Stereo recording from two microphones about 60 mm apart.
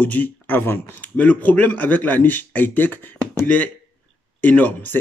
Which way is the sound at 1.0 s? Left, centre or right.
Left.